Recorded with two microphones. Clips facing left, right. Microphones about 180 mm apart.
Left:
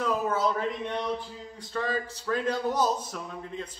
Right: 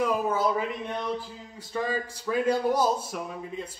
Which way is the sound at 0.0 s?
10° right (ahead or behind).